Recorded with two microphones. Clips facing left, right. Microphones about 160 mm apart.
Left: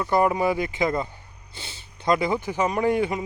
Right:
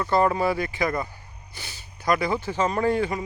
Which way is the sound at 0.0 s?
15° left (ahead or behind).